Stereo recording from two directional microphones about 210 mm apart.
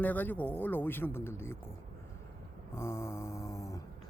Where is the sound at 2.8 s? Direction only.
10° left (ahead or behind).